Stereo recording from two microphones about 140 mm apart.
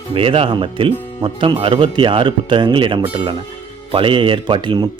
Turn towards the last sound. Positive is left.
turn(degrees=-35)  # may be behind; listen again after turning